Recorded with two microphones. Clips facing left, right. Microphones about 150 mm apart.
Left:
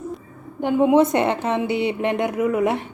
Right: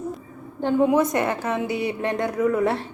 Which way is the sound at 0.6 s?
15° left (ahead or behind).